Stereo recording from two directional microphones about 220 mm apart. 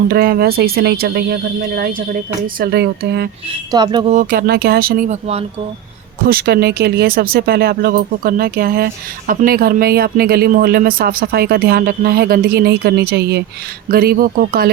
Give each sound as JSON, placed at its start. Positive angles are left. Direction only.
{"t": 0.1, "sound": "speech", "side_deg": -45}
{"t": 3.7, "sound": "speech", "side_deg": -20}
{"t": 4.1, "sound": "speech", "side_deg": -35}
{"t": 6.2, "sound": "speech", "side_deg": -45}